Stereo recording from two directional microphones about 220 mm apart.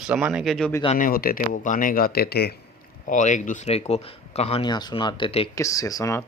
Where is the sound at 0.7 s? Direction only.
20° left (ahead or behind).